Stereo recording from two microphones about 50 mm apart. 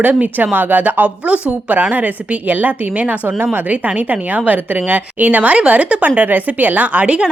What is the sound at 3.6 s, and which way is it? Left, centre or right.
A woman's voice, right.